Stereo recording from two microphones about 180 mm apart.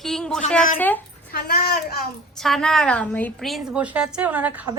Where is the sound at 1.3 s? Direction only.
55° left (ahead or behind).